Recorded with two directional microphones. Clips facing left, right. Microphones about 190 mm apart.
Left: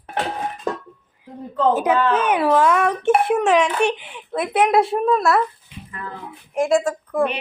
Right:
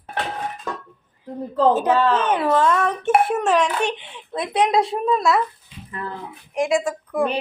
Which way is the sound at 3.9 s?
25° right (ahead or behind).